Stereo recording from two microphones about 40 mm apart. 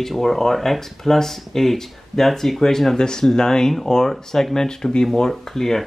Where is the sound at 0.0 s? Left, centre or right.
Centre.